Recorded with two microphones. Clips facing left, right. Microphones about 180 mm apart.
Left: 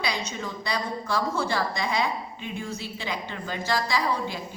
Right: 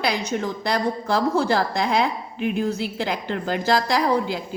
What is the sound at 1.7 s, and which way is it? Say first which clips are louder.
A woman's voice: right 5 dB; 80° right.